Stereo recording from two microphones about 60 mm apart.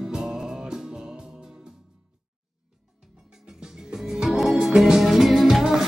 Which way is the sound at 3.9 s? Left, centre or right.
Centre.